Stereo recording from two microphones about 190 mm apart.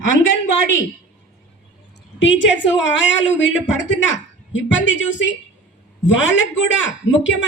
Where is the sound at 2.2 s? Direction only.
75° left (ahead or behind).